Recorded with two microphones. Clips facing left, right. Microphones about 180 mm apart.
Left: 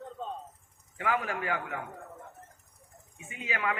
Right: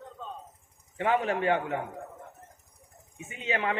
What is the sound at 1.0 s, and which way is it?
Speech, 25° right (ahead or behind).